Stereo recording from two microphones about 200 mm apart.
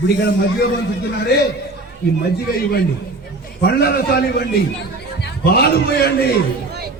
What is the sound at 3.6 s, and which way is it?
A man's voice, 55° left (ahead or behind).